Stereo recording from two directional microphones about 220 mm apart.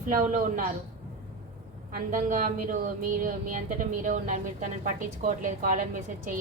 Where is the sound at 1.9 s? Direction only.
40° right (ahead or behind).